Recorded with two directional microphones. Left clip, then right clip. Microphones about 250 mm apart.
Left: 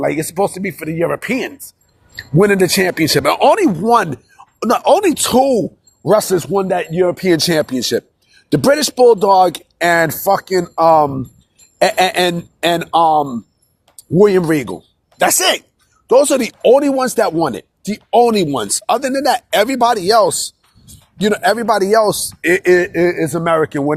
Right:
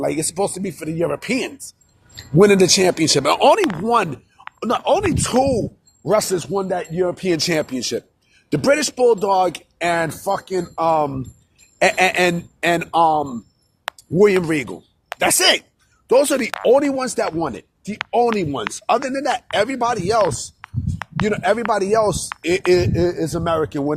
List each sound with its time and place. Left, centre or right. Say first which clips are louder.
0.0 s speech: left 5 dB; centre